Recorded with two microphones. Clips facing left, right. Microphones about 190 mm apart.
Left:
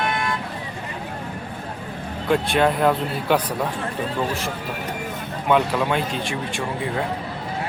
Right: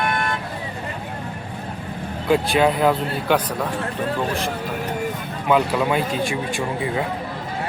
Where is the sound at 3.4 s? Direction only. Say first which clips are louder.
Even; 10° left (ahead or behind).